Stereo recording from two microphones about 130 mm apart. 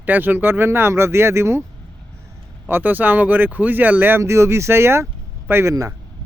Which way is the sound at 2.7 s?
15° right (ahead or behind).